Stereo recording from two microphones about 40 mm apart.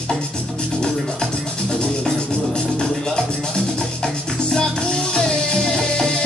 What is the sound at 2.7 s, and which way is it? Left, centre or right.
Music, centre.